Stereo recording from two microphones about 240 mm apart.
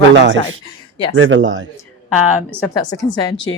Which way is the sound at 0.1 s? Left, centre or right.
Right.